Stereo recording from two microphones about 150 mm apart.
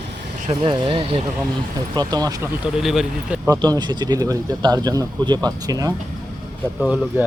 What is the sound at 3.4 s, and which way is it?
Speech, 25° right (ahead or behind).